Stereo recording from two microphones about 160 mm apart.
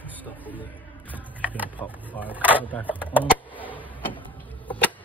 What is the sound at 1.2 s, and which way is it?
Music, 10° right (ahead or behind).